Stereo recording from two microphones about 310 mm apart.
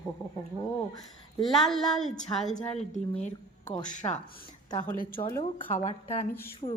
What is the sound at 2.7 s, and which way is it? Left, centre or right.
A woman's voice, left.